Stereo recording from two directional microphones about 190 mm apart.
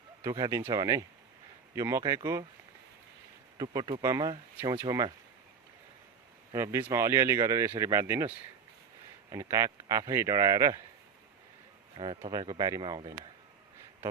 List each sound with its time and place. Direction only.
0.2 s speech: 20° right (ahead or behind)
3.6 s speech: 20° right (ahead or behind)
6.5 s speech: 15° right (ahead or behind)
9.3 s speech: 15° right (ahead or behind)
11.9 s speech: 30° right (ahead or behind)